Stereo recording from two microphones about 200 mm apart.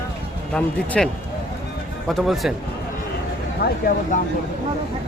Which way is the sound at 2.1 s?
Centre (ahead or behind).